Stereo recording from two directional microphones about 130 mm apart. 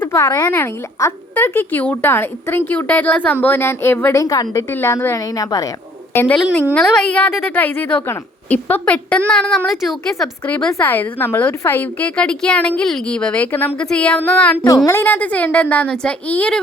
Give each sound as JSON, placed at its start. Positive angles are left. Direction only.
{"t": 0.0, "sound": "a woman's voice", "side_deg": 25}
{"t": 6.1, "sound": "a woman's voice", "side_deg": 10}